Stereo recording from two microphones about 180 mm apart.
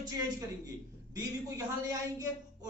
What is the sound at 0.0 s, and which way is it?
A man's voice, 20° right (ahead or behind).